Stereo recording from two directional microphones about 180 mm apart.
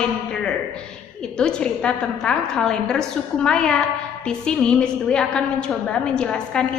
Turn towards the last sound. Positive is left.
turn(degrees=5)  # may be behind; listen again after turning